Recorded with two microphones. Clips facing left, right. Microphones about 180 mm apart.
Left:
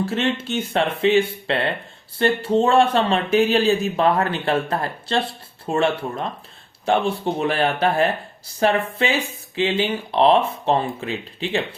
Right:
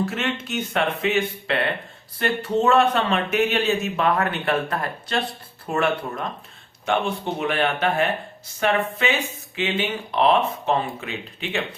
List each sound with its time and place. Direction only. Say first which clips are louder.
0.0 s speech: left 3 dB; 30° left (ahead or behind)